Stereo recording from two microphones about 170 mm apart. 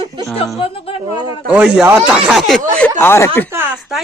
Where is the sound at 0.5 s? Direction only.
35° left (ahead or behind).